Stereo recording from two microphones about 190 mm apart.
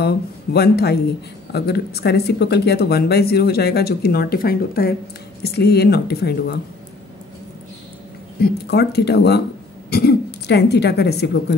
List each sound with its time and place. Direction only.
0.0 s speech: 60° left (ahead or behind)
8.4 s a woman's voice: 60° left (ahead or behind)